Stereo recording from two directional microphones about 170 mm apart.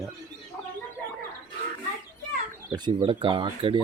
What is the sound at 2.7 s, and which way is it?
Speech, 30° right (ahead or behind).